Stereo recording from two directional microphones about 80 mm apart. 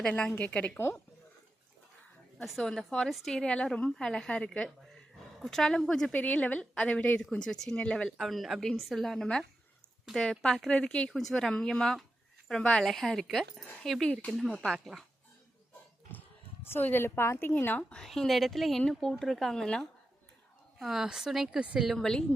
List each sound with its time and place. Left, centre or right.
0.0 s a woman's voice: centre
2.4 s a woman's voice: centre
6.1 s a woman's voice: centre
8.2 s a woman's voice: centre
16.1 s a sound: left
16.6 s a woman's voice: left
18.0 s a woman's voice: centre
20.7 s a woman's voice: centre
21.8 s a woman's voice: centre